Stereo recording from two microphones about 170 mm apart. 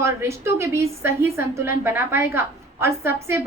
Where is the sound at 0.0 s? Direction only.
15° right (ahead or behind).